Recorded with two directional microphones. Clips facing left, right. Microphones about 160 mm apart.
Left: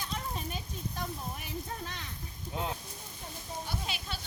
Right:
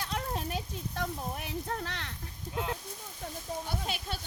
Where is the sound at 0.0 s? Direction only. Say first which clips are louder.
Right 3 dB; 75° right (ahead or behind).